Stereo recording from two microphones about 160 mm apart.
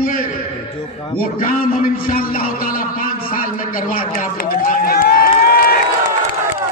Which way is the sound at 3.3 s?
60° left (ahead or behind).